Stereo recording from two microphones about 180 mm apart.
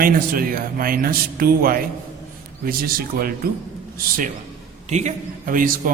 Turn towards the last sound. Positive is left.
turn(degrees=-50)  # may be behind; listen again after turning